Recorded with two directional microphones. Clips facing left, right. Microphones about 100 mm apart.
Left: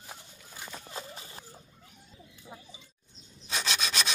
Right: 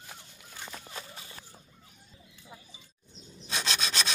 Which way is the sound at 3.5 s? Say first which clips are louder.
Even; 5° left (ahead or behind).